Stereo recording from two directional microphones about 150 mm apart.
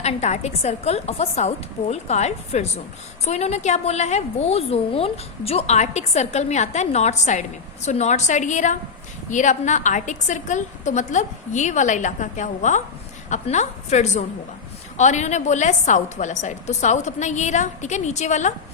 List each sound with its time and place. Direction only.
0.0 s a woman's voice: 50° left (ahead or behind)